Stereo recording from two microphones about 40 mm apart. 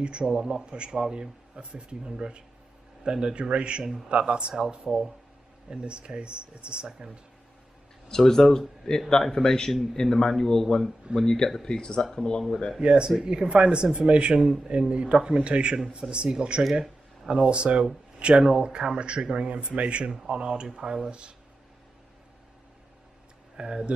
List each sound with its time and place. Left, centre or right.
0.0 s speech: right
4.8 s speech: centre
5.7 s speech: right
8.1 s speech: centre
12.8 s speech: right
23.5 s speech: right